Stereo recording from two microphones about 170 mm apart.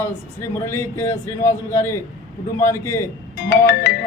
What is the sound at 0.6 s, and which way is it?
A man's voice, 15° left (ahead or behind).